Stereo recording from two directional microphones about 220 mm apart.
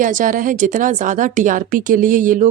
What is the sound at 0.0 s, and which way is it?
Speech, 35° right (ahead or behind).